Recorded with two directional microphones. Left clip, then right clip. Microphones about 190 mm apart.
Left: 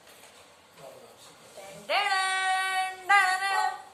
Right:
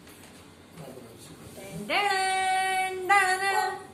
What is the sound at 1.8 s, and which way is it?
Singing, 5° left (ahead or behind).